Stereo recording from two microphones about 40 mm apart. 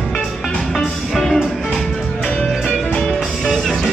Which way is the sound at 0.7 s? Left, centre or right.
Centre.